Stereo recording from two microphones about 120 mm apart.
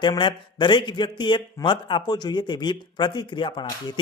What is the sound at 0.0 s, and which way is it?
Speech, 40° left (ahead or behind).